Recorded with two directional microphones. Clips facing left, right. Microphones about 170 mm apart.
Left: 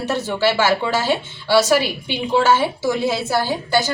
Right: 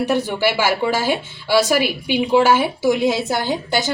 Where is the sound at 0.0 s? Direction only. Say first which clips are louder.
Right 1 dB; 15° right (ahead or behind).